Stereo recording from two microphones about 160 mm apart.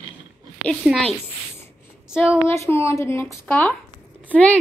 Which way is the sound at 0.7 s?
5° left (ahead or behind).